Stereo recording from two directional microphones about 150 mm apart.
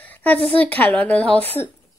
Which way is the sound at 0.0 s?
10° left (ahead or behind).